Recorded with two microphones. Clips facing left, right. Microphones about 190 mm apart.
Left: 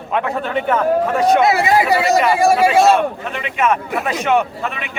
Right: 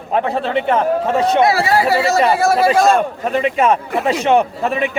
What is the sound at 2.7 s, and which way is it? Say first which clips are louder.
Speech: left 1 dB; 5° left (ahead or behind).